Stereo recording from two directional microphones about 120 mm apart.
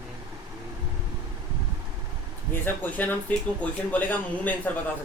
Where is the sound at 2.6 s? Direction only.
15° left (ahead or behind).